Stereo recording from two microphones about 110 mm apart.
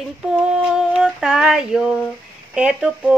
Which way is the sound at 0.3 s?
10° right (ahead or behind).